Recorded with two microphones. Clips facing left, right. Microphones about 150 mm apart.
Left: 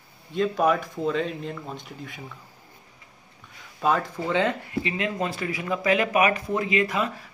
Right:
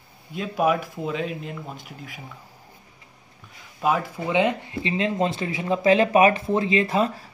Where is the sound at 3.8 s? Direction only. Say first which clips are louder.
Even; 10° right (ahead or behind).